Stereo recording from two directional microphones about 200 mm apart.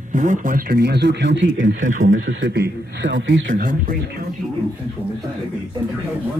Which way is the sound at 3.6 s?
45° right (ahead or behind).